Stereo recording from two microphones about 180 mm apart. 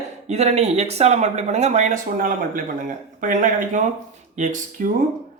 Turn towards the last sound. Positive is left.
turn(degrees=-45)  # may be behind; listen again after turning